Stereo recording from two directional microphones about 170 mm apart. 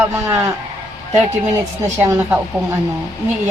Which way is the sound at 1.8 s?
15° right (ahead or behind).